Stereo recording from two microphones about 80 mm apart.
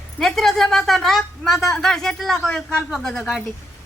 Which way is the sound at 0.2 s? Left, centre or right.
Centre.